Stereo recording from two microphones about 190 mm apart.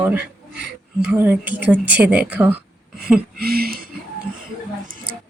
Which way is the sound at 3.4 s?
50° right (ahead or behind).